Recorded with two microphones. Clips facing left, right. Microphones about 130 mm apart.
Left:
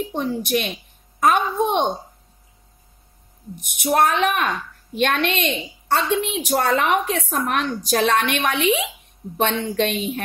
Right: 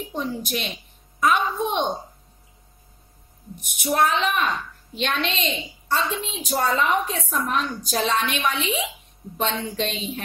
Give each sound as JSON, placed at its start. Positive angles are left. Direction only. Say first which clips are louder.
{"t": 0.1, "sound": "a woman's voice", "louder": "left 3 dB", "side_deg": 55}
{"t": 3.6, "sound": "a woman's voice", "louder": "left 3 dB", "side_deg": 55}